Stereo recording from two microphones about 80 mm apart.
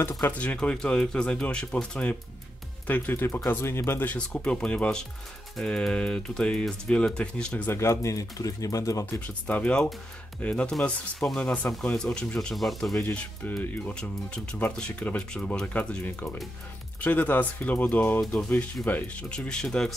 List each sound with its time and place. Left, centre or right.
0.3 s speech: centre
2.9 s speech: left
4.4 s speech: centre
7.7 s speech: left
9.2 s speech: centre
11.3 s speech: centre
13.0 s speech: left; by 20.0 s centre